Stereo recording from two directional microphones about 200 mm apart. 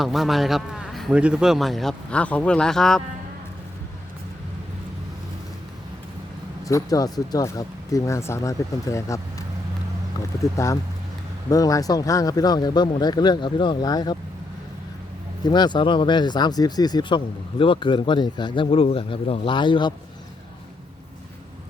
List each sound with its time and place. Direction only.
0.0 s a man's voice: centre (ahead or behind)
6.7 s speech: 15° left (ahead or behind)
10.4 s speech: 15° left (ahead or behind)
15.4 s speech: 20° left (ahead or behind)